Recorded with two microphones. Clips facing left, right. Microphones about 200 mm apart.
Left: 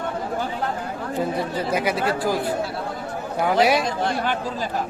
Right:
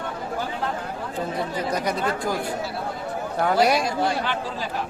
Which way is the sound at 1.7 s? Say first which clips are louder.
Left 4 dB; 5° left (ahead or behind).